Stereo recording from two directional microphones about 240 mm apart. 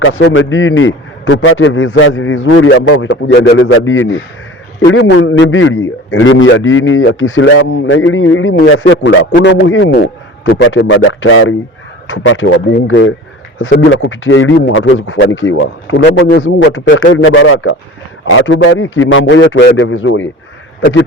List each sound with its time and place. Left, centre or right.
0.0 s a man's voice: left